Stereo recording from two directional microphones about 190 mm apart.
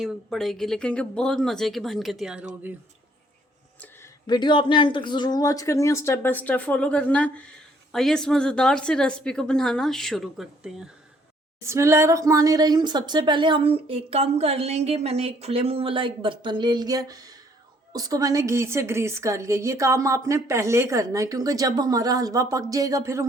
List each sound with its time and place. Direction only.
0.0 s a woman's voice: centre (ahead or behind)
4.3 s a woman's voice: 25° left (ahead or behind); by 10.8 s centre (ahead or behind)
11.6 s a woman's voice: 15° right (ahead or behind)